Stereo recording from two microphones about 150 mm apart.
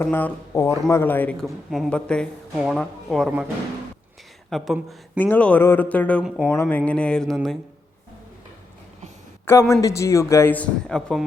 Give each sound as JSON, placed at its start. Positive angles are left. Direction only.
{"t": 0.0, "sound": "a man's voice", "side_deg": 15}
{"t": 4.4, "sound": "speech", "side_deg": 0}
{"t": 5.1, "sound": "a man's voice", "side_deg": 10}
{"t": 9.5, "sound": "a man's voice", "side_deg": 20}